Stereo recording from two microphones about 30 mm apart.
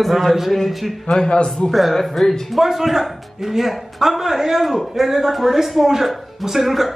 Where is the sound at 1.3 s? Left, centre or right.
Left.